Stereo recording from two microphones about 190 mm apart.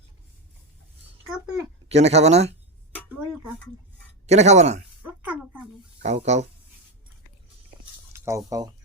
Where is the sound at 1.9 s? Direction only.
35° right (ahead or behind).